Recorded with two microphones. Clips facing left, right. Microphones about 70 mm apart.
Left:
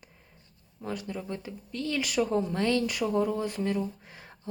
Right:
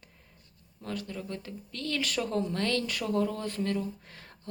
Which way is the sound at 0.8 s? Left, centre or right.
Centre.